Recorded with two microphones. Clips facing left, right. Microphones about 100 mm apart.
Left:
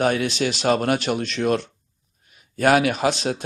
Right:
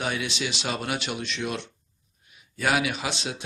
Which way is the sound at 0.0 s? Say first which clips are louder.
Left 9 dB; 45° left (ahead or behind).